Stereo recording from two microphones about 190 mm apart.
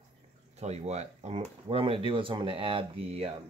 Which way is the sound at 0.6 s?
35° right (ahead or behind).